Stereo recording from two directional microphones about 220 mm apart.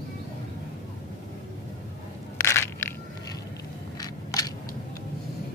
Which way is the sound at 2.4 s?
10° left (ahead or behind).